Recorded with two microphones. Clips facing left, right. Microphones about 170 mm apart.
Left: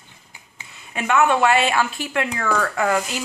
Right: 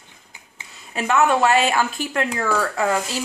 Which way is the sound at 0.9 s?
35° right (ahead or behind).